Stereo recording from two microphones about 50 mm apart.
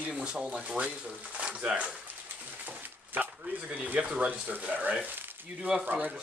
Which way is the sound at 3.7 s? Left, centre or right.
Right.